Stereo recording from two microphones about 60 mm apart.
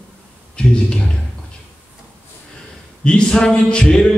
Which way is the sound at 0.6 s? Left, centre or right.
Centre.